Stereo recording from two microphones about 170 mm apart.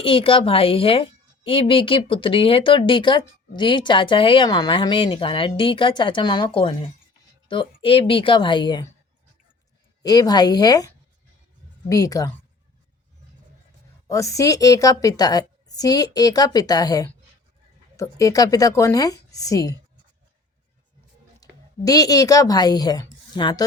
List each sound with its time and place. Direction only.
0.0 s a woman's voice: 30° left (ahead or behind)
10.0 s a woman's voice: 20° left (ahead or behind)
14.1 s a woman's voice: 20° left (ahead or behind)
21.4 s speech: 20° left (ahead or behind)